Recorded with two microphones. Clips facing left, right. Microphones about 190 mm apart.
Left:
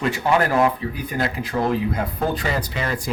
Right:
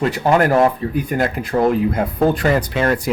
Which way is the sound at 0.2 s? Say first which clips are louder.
Right 5 dB; 40° right (ahead or behind).